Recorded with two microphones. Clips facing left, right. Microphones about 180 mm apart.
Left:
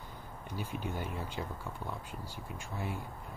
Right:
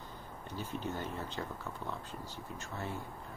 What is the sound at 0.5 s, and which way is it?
Speech, 10° left (ahead or behind).